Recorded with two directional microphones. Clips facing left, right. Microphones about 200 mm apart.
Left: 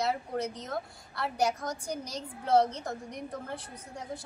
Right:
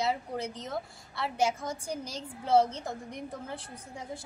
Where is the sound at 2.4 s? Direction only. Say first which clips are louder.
Even; 5° right (ahead or behind).